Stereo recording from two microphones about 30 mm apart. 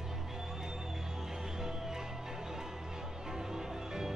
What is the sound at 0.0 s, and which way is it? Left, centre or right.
Music, centre.